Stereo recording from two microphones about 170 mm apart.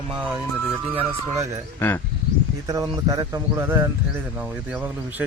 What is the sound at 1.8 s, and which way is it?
Speech, 10° left (ahead or behind).